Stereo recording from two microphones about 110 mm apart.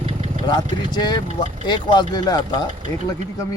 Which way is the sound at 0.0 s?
70° right (ahead or behind).